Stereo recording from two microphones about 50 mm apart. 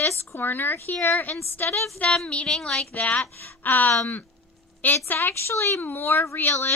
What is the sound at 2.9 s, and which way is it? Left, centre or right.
Speech, left.